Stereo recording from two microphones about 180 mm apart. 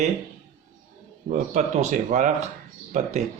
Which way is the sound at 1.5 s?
40° right (ahead or behind).